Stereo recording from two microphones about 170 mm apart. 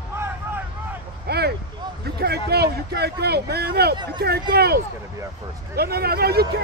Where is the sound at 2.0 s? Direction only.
70° right (ahead or behind).